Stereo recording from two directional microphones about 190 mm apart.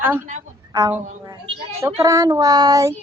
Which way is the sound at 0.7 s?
20° right (ahead or behind).